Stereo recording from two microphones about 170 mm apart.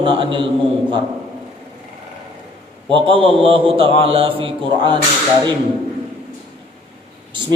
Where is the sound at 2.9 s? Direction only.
30° right (ahead or behind).